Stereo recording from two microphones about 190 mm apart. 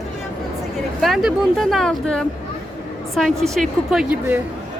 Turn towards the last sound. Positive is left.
turn(degrees=-5)  # may be behind; listen again after turning